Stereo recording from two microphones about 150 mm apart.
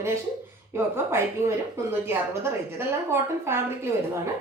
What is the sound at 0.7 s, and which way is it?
A woman's voice, 15° right (ahead or behind).